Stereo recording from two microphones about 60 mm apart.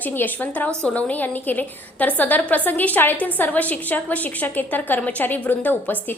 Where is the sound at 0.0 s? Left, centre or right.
Left.